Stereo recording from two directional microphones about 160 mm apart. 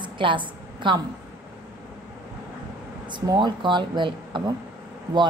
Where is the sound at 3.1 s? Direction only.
30° right (ahead or behind).